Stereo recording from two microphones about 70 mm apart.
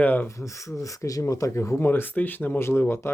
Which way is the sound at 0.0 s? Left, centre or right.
Left.